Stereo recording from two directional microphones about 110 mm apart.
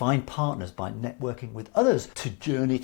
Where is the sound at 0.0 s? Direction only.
15° left (ahead or behind).